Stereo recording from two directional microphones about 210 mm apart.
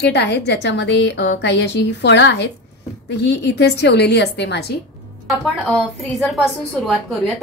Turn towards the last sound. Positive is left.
turn(degrees=0)  # may be behind; listen again after turning